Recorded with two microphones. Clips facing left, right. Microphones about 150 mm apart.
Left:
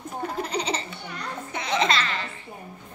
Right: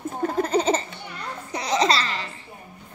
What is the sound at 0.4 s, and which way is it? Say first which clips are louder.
Laughter: right 8 dB; 45° right (ahead or behind).